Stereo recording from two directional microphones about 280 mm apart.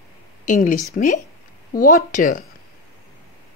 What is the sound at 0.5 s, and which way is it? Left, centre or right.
Speech, left.